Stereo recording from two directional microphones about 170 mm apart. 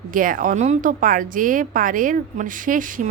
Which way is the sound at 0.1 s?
55° right (ahead or behind).